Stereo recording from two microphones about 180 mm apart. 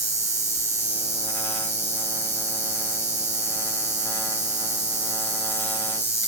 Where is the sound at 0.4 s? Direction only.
15° left (ahead or behind).